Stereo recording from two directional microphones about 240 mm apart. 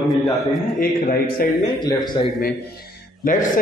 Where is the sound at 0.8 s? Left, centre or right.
Left.